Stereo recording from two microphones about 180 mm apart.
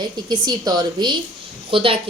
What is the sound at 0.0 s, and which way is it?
A woman's voice, 20° right (ahead or behind).